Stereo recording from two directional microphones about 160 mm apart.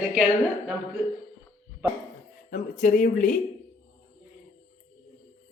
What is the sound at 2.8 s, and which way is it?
Speech, 50° left (ahead or behind).